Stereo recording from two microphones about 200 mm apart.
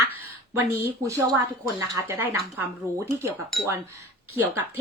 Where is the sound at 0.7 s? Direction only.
15° right (ahead or behind).